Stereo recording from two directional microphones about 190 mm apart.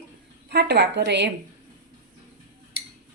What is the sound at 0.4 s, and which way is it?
Speech, 60° right (ahead or behind).